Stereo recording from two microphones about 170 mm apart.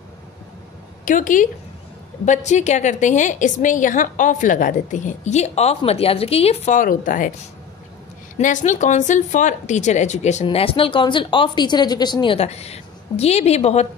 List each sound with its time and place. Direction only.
1.0 s a woman's voice: 50° left (ahead or behind)
8.4 s a woman's voice: 45° left (ahead or behind)